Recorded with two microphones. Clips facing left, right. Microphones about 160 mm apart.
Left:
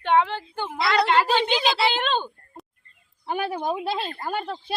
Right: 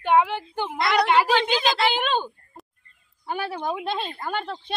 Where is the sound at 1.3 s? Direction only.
5° left (ahead or behind).